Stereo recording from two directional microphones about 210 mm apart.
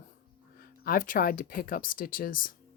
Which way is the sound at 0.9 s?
40° left (ahead or behind).